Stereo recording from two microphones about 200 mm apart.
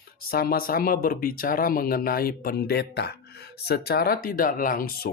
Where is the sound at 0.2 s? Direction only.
50° left (ahead or behind).